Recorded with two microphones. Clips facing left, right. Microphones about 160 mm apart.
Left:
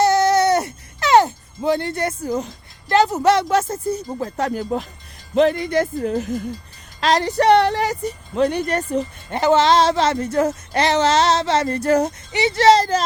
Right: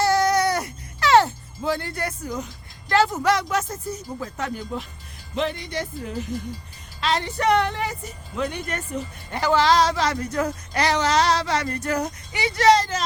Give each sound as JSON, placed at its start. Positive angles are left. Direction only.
{"t": 0.0, "sound": "music", "side_deg": 20}
{"t": 2.9, "sound": "speech", "side_deg": 20}
{"t": 9.4, "sound": "speech", "side_deg": 20}